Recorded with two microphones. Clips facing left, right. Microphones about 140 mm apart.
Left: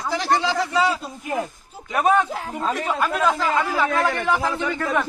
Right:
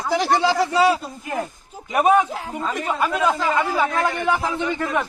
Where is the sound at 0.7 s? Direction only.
15° right (ahead or behind).